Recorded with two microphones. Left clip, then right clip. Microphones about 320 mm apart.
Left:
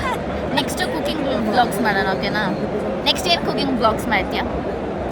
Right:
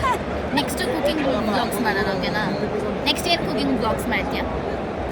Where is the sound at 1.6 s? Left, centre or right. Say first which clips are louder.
Left 4 dB; centre.